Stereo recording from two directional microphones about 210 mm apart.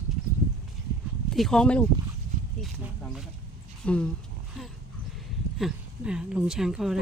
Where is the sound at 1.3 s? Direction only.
Centre (ahead or behind).